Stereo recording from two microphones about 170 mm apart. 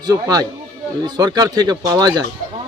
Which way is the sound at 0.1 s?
20° right (ahead or behind).